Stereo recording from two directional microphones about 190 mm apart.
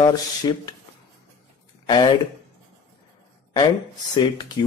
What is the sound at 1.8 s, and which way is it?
Speech, 25° left (ahead or behind).